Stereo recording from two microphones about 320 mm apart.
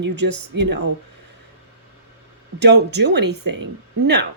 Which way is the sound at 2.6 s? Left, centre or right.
Right.